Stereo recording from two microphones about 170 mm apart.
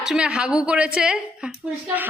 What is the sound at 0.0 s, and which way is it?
A woman's voice, 5° right (ahead or behind).